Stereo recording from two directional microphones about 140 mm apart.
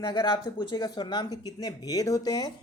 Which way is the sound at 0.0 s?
30° left (ahead or behind).